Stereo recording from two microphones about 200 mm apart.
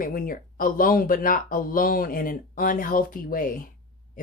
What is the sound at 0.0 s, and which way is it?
Speech, 45° left (ahead or behind).